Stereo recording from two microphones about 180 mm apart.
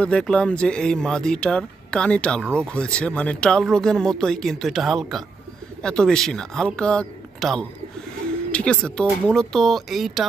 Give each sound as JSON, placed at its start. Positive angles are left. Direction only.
{"t": 0.0, "sound": "speech", "side_deg": 5}